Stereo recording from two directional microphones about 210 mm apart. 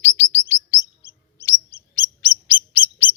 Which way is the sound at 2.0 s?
20° left (ahead or behind).